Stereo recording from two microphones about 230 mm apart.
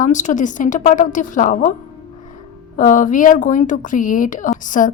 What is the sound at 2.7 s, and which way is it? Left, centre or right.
A woman's voice, left.